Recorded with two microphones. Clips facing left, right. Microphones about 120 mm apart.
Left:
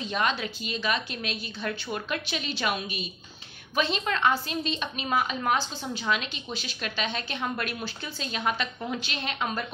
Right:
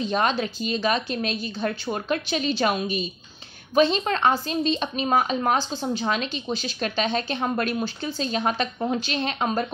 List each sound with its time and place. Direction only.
0.0 s a woman's voice: 35° right (ahead or behind)